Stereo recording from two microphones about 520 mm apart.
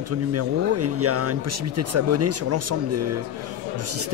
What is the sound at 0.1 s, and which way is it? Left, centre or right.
Speech, right.